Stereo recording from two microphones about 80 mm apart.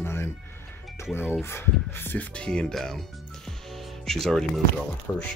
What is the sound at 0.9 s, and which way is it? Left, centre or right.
Music, left.